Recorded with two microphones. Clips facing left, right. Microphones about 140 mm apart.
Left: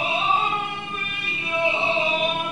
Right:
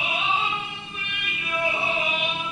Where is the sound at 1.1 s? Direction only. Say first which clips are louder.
Left 1 dB; 35° left (ahead or behind).